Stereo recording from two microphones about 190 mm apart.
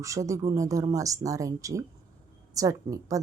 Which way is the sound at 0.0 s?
15° right (ahead or behind).